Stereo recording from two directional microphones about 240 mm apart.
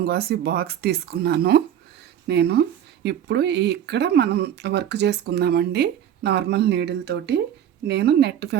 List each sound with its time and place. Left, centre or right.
0.0 s speech: right